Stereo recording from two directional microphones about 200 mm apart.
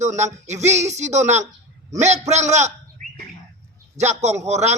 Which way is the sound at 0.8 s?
35° right (ahead or behind).